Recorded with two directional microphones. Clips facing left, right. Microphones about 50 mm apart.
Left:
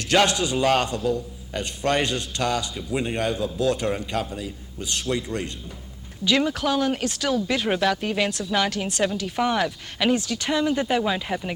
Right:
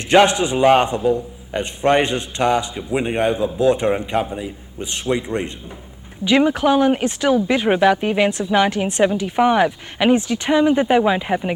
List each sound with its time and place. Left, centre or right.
0.1 s a man's voice: right